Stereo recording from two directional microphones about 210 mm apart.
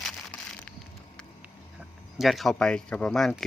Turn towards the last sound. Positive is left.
turn(degrees=5)  # may be behind; listen again after turning